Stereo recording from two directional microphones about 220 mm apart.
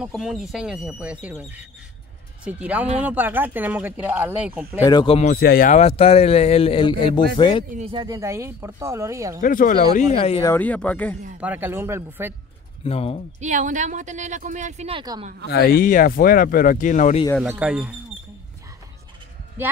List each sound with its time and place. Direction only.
0.0 s speech: centre (ahead or behind)
4.8 s speech: 20° left (ahead or behind)
5.3 s speech: 45° left (ahead or behind)
5.8 s speech: 25° left (ahead or behind)
7.7 s speech: 25° right (ahead or behind)
9.4 s speech: 40° left (ahead or behind)
9.9 s speech: 25° left (ahead or behind)
10.4 s speech: 10° left (ahead or behind)
11.4 s speech: 10° right (ahead or behind)
12.8 s speech: 25° left (ahead or behind)
13.4 s speech: 35° right (ahead or behind)
15.4 s speech: 45° left (ahead or behind)
17.4 s speech: 5° right (ahead or behind)